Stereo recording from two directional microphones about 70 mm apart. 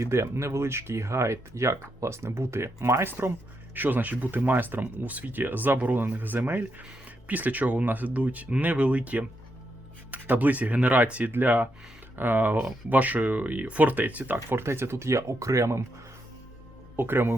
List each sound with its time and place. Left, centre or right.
0.0 s speech: right
14.3 s speech: right
17.0 s speech: right